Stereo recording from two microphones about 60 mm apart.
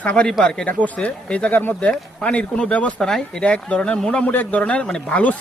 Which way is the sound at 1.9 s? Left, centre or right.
Centre.